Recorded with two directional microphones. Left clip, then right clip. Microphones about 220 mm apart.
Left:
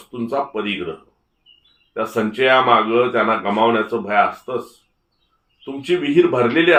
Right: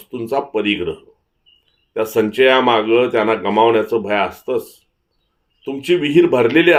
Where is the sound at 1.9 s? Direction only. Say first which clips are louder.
Right 4 dB; 55° right (ahead or behind).